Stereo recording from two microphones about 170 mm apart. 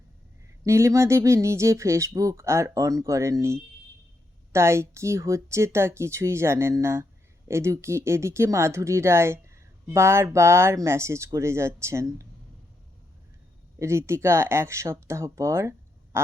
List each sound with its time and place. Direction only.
0.6 s speech: 15° right (ahead or behind)
13.7 s speech: 15° right (ahead or behind)
16.1 s duck: 15° right (ahead or behind)